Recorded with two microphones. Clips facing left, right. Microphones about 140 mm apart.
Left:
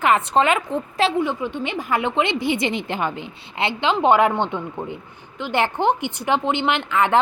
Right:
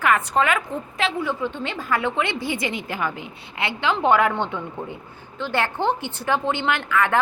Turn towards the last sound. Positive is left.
turn(degrees=20)  # may be behind; listen again after turning